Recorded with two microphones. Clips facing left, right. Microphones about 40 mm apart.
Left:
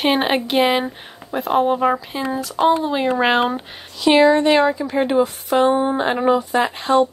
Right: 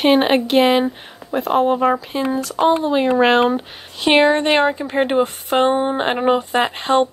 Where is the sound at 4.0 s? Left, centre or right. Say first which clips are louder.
Left 1 dB; right.